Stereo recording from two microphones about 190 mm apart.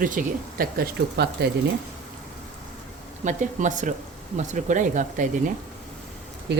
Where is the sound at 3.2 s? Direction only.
40° right (ahead or behind).